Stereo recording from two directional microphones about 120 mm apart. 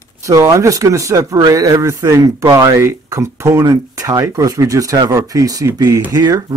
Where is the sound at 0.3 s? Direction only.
25° right (ahead or behind).